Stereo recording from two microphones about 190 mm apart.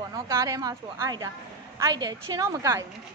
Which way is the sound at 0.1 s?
15° right (ahead or behind).